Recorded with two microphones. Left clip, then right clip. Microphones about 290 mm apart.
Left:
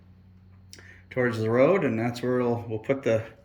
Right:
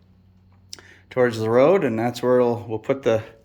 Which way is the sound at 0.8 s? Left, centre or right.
Centre.